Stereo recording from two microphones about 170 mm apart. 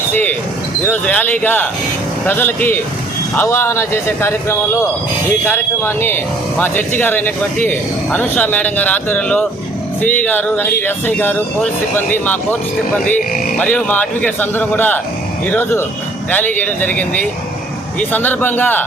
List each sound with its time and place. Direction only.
0.1 s speech: 10° left (ahead or behind)
13.1 s cattle: 55° left (ahead or behind)
13.6 s speech: 10° left (ahead or behind)